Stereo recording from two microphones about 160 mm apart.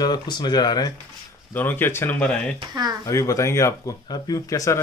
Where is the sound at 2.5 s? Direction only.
25° right (ahead or behind).